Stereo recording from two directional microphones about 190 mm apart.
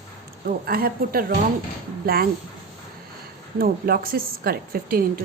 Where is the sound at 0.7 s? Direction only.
50° right (ahead or behind).